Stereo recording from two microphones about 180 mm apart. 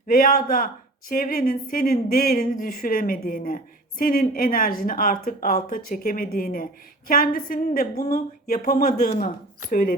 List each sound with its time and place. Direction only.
0.1 s a woman's voice: 55° left (ahead or behind)